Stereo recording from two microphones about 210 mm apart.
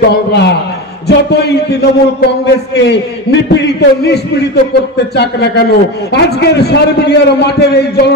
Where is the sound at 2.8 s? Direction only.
55° left (ahead or behind).